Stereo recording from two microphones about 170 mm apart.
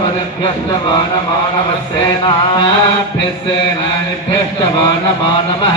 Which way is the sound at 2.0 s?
25° left (ahead or behind).